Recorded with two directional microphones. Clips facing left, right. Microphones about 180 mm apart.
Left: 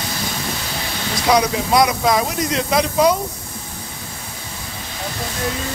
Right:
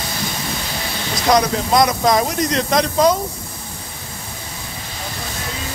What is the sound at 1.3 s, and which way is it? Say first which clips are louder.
Speech: right 1 dB; 5° left (ahead or behind).